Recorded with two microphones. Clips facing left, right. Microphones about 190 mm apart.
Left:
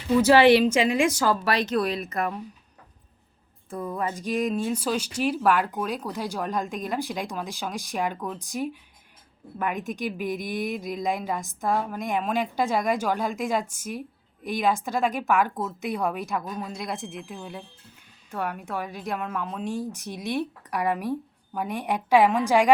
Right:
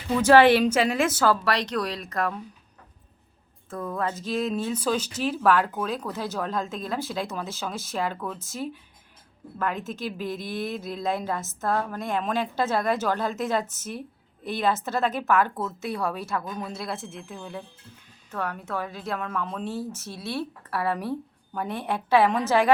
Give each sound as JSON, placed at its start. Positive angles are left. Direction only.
{"t": 0.2, "sound": "speech", "side_deg": 10}
{"t": 1.7, "sound": "speech", "side_deg": 20}
{"t": 3.7, "sound": "speech", "side_deg": 10}